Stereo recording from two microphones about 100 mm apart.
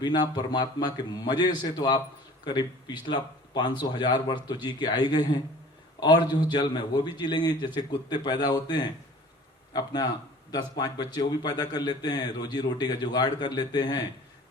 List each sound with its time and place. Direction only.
0.0 s a man's voice: 45° left (ahead or behind)